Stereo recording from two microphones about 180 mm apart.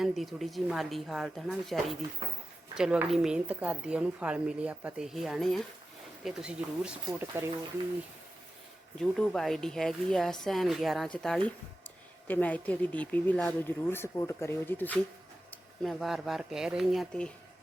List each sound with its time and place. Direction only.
0.0 s a woman's voice: centre (ahead or behind)
9.0 s a woman's voice: 5° left (ahead or behind)